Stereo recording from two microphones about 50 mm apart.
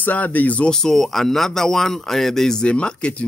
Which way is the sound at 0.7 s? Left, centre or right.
Centre.